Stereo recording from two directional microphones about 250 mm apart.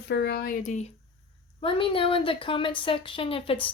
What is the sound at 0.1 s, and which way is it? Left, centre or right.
Speech, left.